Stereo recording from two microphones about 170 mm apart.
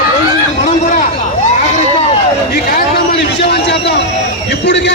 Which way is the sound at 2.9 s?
75° left (ahead or behind).